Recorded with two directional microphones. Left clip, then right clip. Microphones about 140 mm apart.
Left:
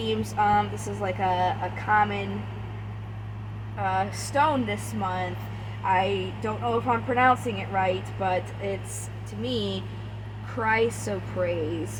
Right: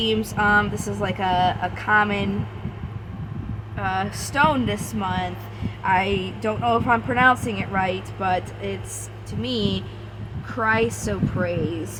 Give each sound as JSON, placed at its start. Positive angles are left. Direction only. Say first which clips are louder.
{"t": 0.0, "sound": "speech", "louder": "right 3 dB", "side_deg": -45}
{"t": 3.8, "sound": "speech", "louder": "right 1 dB", "side_deg": -40}